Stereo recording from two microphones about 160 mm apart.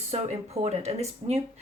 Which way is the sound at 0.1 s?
40° right (ahead or behind).